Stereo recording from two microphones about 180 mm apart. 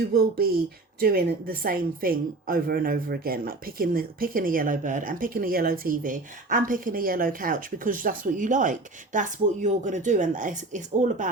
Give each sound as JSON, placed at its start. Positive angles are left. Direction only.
{"t": 0.1, "sound": "a woman's voice", "side_deg": -60}